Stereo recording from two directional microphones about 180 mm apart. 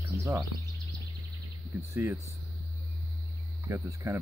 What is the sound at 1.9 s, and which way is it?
Speech, 15° right (ahead or behind).